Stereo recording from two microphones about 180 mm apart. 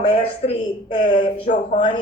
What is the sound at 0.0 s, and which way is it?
Speech, 35° left (ahead or behind).